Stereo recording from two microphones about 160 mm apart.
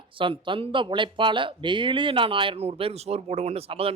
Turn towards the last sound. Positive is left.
turn(degrees=-35)  # may be behind; listen again after turning